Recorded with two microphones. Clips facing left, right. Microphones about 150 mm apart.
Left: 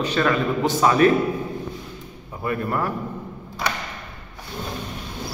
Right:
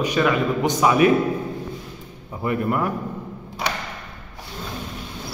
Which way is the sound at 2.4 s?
20° right (ahead or behind).